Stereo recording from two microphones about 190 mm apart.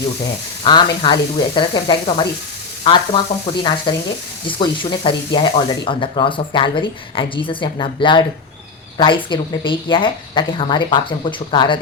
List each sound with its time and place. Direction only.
0.6 s speech: 20° left (ahead or behind)